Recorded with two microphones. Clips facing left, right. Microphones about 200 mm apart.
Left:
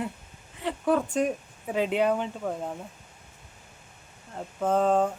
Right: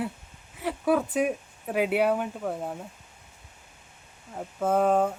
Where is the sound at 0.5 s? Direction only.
5° right (ahead or behind).